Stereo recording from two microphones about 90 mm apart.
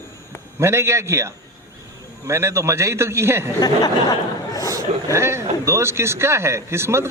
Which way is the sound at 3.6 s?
45° left (ahead or behind).